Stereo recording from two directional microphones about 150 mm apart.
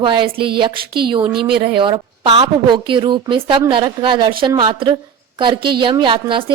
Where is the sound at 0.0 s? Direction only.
35° right (ahead or behind).